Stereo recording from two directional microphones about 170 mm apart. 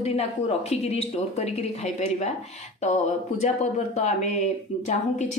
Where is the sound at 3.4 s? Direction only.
45° left (ahead or behind).